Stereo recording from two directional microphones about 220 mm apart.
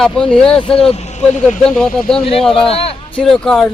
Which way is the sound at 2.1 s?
25° left (ahead or behind).